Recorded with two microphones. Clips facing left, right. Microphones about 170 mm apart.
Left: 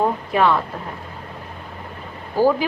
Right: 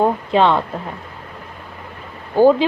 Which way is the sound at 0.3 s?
25° right (ahead or behind).